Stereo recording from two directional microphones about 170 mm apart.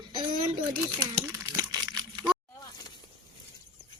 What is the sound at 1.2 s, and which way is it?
Crumpling, 20° right (ahead or behind).